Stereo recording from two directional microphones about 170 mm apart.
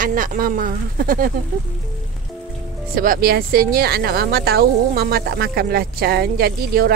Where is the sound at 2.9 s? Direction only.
55° right (ahead or behind).